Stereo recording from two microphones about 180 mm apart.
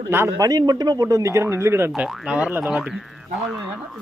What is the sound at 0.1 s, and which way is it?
Speech, 15° right (ahead or behind).